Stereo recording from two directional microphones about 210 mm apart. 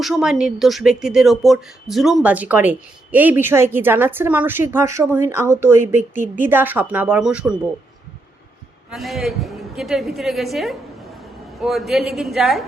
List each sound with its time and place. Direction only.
0.0 s speech: centre (ahead or behind)
5.8 s speech: 35° left (ahead or behind)
6.1 s speech: 10° right (ahead or behind)
8.9 s a woman's voice: centre (ahead or behind)